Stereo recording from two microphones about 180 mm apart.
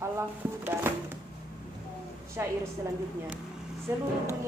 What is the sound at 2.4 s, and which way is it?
Speech, 10° right (ahead or behind).